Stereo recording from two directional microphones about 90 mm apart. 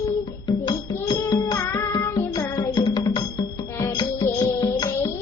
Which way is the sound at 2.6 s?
55° left (ahead or behind).